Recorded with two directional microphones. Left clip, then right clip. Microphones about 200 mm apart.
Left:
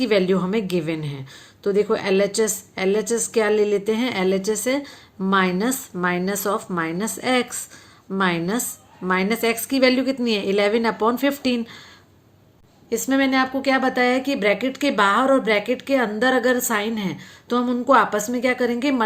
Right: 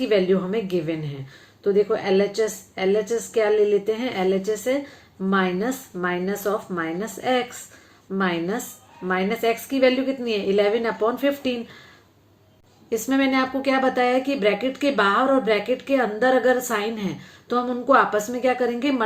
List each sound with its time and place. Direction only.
0.0 s a woman's voice: 45° left (ahead or behind)
12.9 s speech: 30° left (ahead or behind)